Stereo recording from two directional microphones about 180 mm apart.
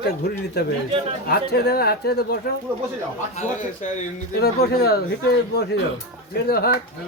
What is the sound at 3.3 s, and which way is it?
Speech, 45° left (ahead or behind).